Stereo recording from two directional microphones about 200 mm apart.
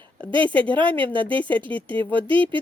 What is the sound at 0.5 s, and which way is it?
A woman's voice, 5° left (ahead or behind).